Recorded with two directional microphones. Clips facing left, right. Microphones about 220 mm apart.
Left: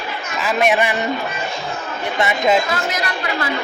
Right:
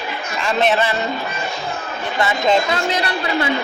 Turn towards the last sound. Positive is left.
turn(degrees=-30)  # may be behind; listen again after turning